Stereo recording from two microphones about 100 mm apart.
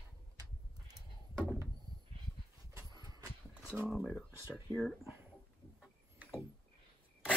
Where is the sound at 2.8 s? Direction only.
40° right (ahead or behind).